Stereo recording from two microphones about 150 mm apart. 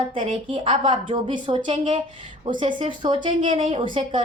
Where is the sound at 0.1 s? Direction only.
35° right (ahead or behind).